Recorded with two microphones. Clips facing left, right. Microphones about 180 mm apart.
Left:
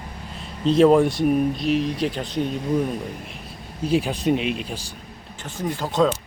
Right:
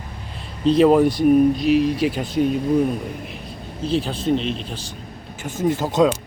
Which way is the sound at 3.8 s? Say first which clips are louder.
Left 1 dB; 10° left (ahead or behind).